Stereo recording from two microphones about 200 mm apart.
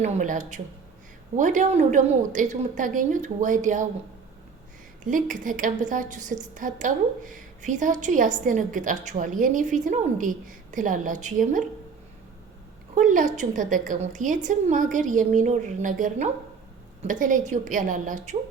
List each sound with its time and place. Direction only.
0.0 s a woman's voice: 40° right (ahead or behind)
5.0 s a woman's voice: 40° right (ahead or behind)
12.9 s a woman's voice: 40° right (ahead or behind)